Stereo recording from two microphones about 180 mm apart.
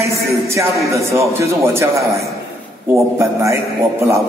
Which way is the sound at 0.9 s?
15° right (ahead or behind).